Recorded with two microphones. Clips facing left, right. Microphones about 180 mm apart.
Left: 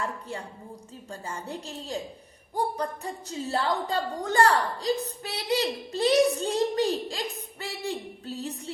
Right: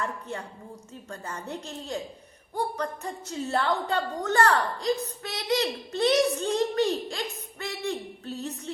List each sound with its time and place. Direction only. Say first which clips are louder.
0.0 s a woman's voice: even; 30° left (ahead or behind)